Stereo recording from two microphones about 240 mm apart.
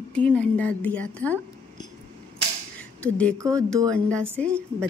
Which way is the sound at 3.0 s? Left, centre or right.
Centre.